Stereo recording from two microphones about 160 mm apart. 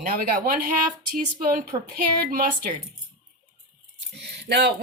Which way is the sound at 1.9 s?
65° right (ahead or behind).